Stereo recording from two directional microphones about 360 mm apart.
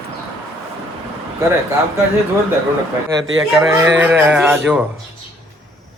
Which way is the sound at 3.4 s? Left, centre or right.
Centre.